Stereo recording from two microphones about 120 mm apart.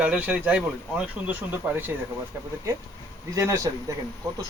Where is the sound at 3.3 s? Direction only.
25° right (ahead or behind).